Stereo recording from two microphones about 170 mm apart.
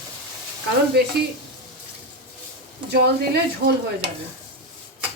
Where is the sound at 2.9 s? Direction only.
80° right.